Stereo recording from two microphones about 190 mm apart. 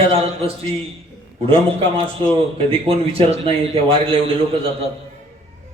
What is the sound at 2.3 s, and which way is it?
Speech, 30° right (ahead or behind).